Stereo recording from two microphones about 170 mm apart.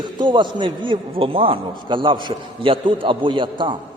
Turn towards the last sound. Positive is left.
turn(degrees=-30)  # may be behind; listen again after turning